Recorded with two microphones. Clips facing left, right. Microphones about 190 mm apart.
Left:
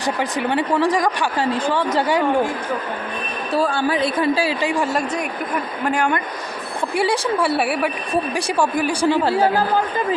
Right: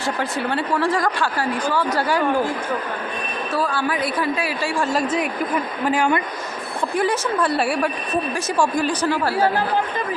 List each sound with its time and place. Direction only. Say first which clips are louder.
0.2 s a woman's voice: left 2 dB; 15° left (ahead or behind)
3.7 s a man's voice: left 3 dB; 25° left (ahead or behind)
5.8 s a man's voice: right 1 dB; 5° right (ahead or behind)
7.0 s a woman's voice: left 2 dB; 10° left (ahead or behind)
9.0 s a man's voice: left 5 dB; 20° left (ahead or behind)